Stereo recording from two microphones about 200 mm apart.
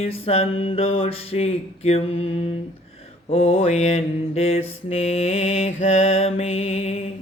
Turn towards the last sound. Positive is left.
turn(degrees=35)  # may be behind; listen again after turning